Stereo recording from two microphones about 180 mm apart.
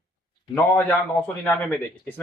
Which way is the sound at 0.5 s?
10° left (ahead or behind).